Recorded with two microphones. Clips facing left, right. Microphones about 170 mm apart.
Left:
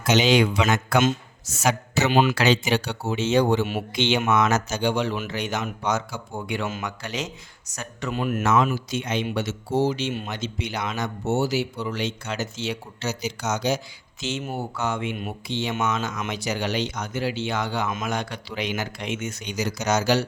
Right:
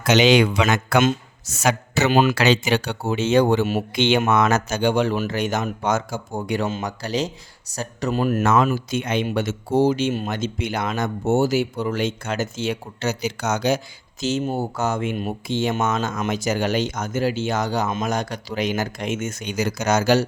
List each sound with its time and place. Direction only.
0.0 s a man's voice: 75° right (ahead or behind)
2.0 s speech: 45° right (ahead or behind)
2.3 s speech: 70° right (ahead or behind); by 8.4 s 40° right (ahead or behind)
8.4 s speech: 55° right (ahead or behind)
14.2 s speech: 40° right (ahead or behind)